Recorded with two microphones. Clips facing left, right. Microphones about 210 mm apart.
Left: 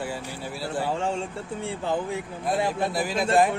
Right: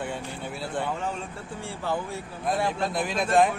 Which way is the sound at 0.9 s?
30° left (ahead or behind).